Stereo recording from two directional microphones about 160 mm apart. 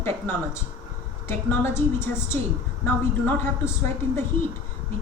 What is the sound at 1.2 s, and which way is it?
A woman's voice, 15° left (ahead or behind).